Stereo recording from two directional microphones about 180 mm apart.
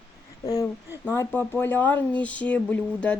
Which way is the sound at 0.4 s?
20° left (ahead or behind).